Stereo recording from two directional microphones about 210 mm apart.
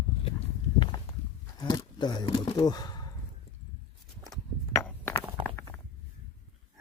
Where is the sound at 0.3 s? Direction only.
25° left (ahead or behind).